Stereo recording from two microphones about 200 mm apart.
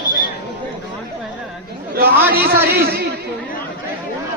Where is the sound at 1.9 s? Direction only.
50° right (ahead or behind).